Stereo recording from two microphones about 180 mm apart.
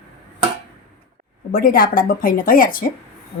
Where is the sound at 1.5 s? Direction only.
55° left (ahead or behind).